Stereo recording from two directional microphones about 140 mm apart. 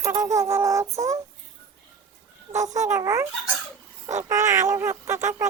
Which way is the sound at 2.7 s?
20° right (ahead or behind).